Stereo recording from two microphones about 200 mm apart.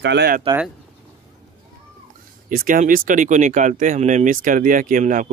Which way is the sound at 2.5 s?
45° right (ahead or behind).